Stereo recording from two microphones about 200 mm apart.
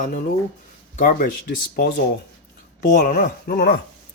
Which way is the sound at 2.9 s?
45° left (ahead or behind).